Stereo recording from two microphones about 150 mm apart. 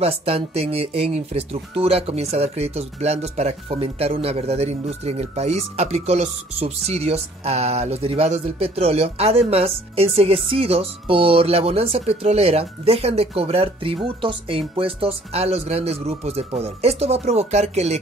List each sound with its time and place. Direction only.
0.0 s speech: 40° right (ahead or behind)